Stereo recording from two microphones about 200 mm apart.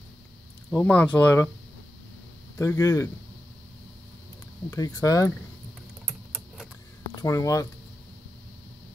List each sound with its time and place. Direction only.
0.7 s speech: 5° left (ahead or behind)
2.5 s speech: 15° left (ahead or behind)
4.6 s speech: 15° left (ahead or behind)
6.0 s typing: 5° right (ahead or behind)
7.2 s speech: 15° left (ahead or behind)